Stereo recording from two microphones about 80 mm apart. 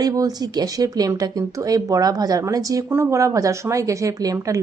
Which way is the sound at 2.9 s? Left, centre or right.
Right.